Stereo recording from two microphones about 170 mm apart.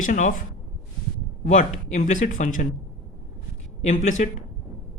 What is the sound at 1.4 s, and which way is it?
Speech, 45° left (ahead or behind).